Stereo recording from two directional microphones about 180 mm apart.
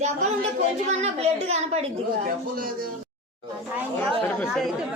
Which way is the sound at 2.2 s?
50° right (ahead or behind).